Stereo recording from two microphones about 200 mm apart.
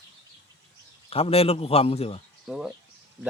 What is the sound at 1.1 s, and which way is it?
A man's voice, 30° left (ahead or behind).